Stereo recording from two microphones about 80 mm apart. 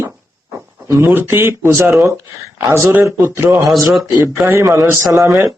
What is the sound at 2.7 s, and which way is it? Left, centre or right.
Speech, right.